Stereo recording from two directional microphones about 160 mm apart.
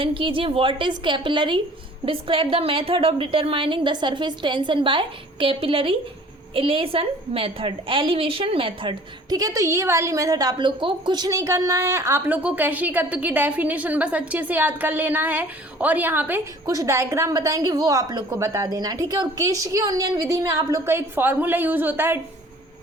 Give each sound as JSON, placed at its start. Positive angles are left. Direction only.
{"t": 0.0, "sound": "a woman's voice", "side_deg": -35}